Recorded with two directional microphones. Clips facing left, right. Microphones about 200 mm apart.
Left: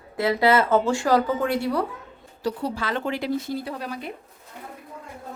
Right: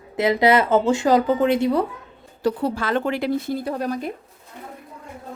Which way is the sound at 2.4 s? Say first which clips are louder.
Right 5 dB; 50° right (ahead or behind).